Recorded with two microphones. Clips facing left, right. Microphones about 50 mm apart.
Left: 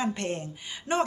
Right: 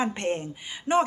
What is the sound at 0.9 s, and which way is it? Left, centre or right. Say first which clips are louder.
Speech: right 4 dB; centre.